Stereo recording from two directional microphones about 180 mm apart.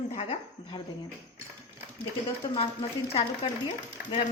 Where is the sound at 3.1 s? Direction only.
35° left (ahead or behind).